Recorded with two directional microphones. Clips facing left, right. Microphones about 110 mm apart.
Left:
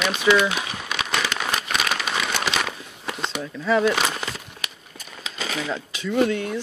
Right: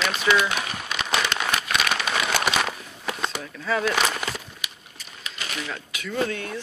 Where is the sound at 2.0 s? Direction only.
5° right (ahead or behind).